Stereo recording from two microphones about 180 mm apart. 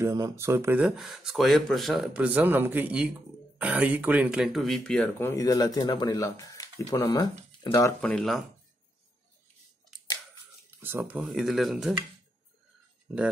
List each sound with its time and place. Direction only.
0.0 s speech: 15° right (ahead or behind); by 7.9 s 20° left (ahead or behind)
8.0 s speech: centre (ahead or behind)
10.8 s speech: 10° right (ahead or behind)